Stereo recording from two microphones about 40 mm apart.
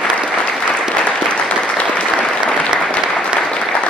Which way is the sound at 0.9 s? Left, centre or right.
Left.